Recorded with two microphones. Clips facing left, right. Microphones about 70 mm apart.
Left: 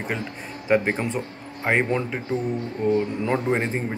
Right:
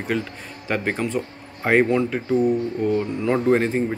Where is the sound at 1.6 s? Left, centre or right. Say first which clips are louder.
Right 4 dB; centre.